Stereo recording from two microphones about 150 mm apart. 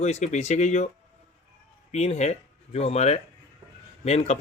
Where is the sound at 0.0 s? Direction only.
50° left (ahead or behind).